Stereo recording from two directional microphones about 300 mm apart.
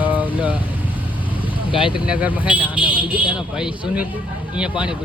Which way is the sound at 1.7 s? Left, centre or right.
Centre.